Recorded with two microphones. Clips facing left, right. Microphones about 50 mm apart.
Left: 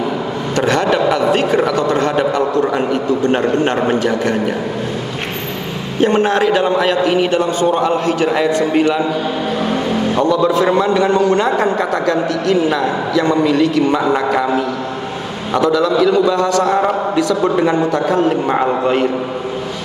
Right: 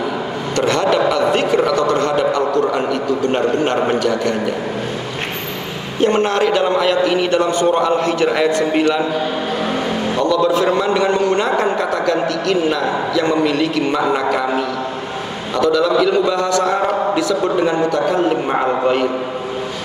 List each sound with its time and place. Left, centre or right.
0.6 s a man's voice: left
6.0 s a man's voice: left
10.1 s a man's voice: left
13.2 s a man's voice: right
13.9 s a man's voice: centre
15.8 s a man's voice: right
16.3 s a man's voice: left